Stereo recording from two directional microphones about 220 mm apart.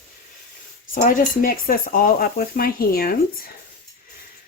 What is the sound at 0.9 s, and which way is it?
Speech, 40° left (ahead or behind).